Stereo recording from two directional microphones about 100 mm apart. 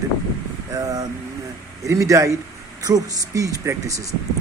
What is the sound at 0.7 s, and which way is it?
Speech, 35° right (ahead or behind).